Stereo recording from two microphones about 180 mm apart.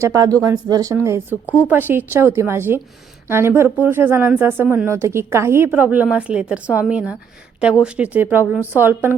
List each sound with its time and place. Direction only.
0.0 s speech: 20° right (ahead or behind)